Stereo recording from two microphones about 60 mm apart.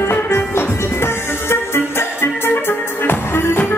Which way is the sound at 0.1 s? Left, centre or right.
Left.